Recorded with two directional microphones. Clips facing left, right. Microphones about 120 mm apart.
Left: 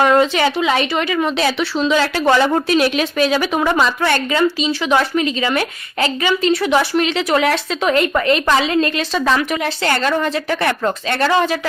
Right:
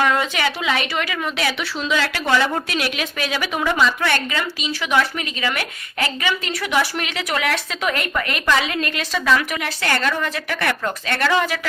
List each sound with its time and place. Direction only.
0.1 s speech: 35° left (ahead or behind)